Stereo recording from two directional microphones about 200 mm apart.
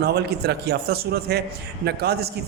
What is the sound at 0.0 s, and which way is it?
A man's voice, 55° right (ahead or behind).